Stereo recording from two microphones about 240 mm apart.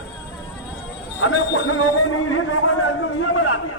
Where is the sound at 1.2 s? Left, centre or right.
Left.